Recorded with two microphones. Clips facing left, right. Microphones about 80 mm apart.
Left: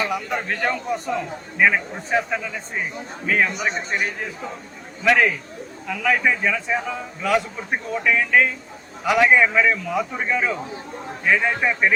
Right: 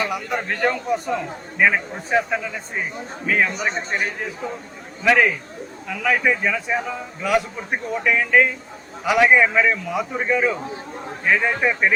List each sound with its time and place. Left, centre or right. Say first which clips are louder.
0.3 s a man's voice: right 5 dB; centre
3.7 s a man's voice: even; right
5.0 s a man's voice: right 1 dB; centre